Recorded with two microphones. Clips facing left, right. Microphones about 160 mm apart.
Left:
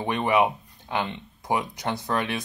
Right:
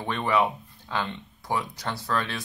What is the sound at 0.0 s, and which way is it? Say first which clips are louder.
Speech: left 3 dB; 15° left (ahead or behind).